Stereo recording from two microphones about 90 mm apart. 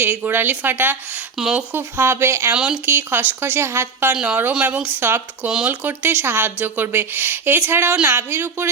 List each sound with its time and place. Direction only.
0.0 s a woman's voice: 20° right (ahead or behind)
1.4 s speech: 5° right (ahead or behind)
1.7 s a woman's voice: 25° right (ahead or behind)
4.1 s speech: 15° right (ahead or behind)
4.9 s a woman's voice: 25° right (ahead or behind)
5.5 s speech: 5° right (ahead or behind)
5.8 s a woman's voice: 20° right (ahead or behind)